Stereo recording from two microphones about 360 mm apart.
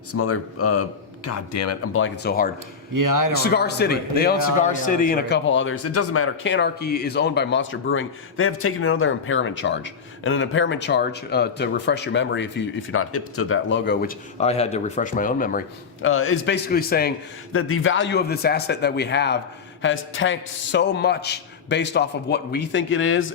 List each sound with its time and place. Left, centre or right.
0.1 s speech: left
2.9 s a man's voice: right
3.4 s a man's voice: left
16.0 s a man's voice: left
17.5 s a man's voice: left